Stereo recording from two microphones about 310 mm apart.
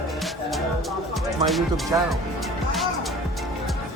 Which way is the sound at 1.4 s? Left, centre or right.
Centre.